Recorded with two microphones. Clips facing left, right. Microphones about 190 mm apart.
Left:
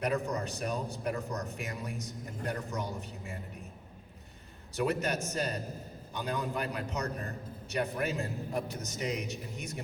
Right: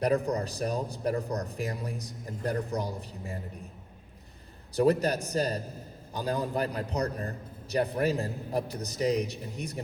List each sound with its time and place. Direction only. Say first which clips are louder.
0.0 s a man's voice: right 5 dB; 35° right (ahead or behind)
4.7 s a man's voice: right 7 dB; 35° right (ahead or behind)